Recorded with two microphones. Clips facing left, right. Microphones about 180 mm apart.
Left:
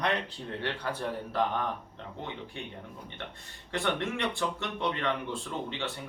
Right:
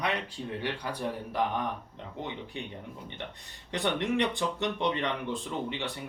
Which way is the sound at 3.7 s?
20° right (ahead or behind).